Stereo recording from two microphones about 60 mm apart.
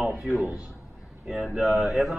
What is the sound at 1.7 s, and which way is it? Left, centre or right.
Speech, centre.